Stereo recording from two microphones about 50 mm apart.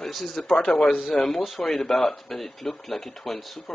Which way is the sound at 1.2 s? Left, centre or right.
Centre.